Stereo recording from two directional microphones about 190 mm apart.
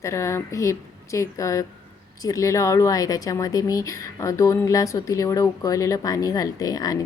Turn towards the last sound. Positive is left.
turn(degrees=20)  # may be behind; listen again after turning